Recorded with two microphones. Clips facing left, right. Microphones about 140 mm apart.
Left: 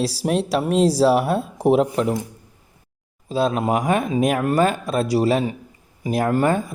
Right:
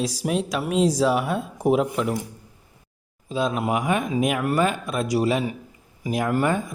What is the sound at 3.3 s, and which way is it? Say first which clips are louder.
A man's voice: left 4 dB; 35° left (ahead or behind).